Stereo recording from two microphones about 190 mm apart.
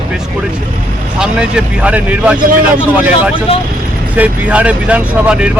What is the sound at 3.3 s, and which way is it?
Speech, 30° left (ahead or behind).